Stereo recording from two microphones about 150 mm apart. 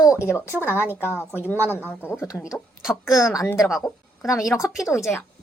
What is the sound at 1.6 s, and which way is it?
Speech, 15° right (ahead or behind).